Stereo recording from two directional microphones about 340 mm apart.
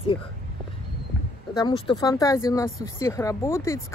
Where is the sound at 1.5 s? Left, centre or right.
Centre.